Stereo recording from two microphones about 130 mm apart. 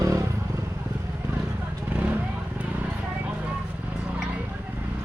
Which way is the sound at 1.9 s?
15° right (ahead or behind).